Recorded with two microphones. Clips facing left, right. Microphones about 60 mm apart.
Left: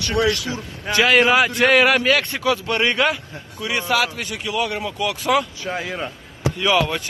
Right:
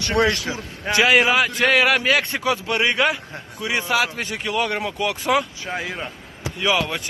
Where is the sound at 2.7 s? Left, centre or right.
Centre.